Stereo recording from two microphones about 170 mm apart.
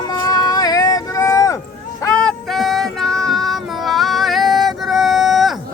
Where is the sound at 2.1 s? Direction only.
Centre (ahead or behind).